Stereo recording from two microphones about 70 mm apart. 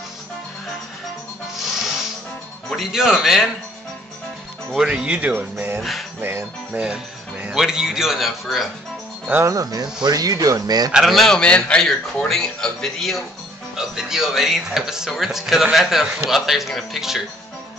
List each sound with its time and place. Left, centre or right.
2.7 s speech: centre
4.7 s speech: centre; by 5.8 s right
5.8 s music: centre
6.7 s music: centre
7.6 s speech: centre
9.4 s speech: right
10.9 s a man's voice: centre
13.7 s speech: centre